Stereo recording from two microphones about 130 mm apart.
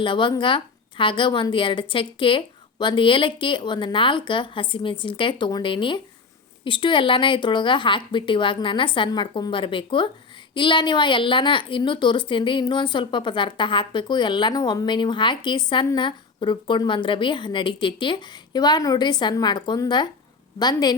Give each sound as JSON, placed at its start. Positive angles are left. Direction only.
{"t": 0.0, "sound": "speech", "side_deg": 40}